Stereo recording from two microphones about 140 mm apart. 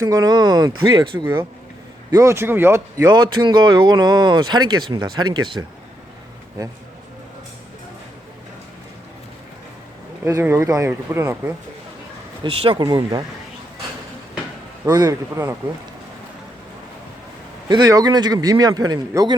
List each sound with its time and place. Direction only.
0.0 s speech: 25° right (ahead or behind)
2.0 s a man's voice: 20° right (ahead or behind)
3.1 s speech: 30° right (ahead or behind)
10.2 s a man's voice: 20° right (ahead or behind)
12.4 s speech: 40° right (ahead or behind)
14.8 s a man's voice: 25° right (ahead or behind)
17.7 s a man's voice: 30° right (ahead or behind)